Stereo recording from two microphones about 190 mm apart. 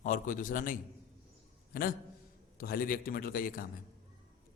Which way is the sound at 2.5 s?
50° left (ahead or behind).